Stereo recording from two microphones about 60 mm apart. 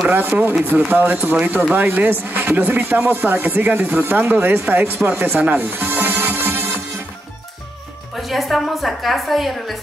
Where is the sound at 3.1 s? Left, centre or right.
Right.